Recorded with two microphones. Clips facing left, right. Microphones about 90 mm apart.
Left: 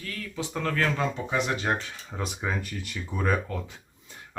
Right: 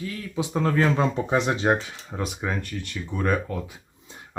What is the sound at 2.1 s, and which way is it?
Speech, centre (ahead or behind).